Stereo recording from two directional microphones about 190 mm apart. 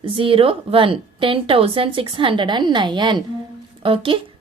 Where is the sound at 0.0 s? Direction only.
30° right (ahead or behind).